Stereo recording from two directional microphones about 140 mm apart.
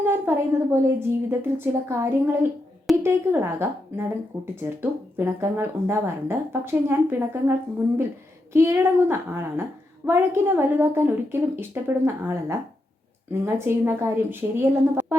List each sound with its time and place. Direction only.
0.0 s speech: 15° right (ahead or behind)
8.5 s speech: 20° right (ahead or behind)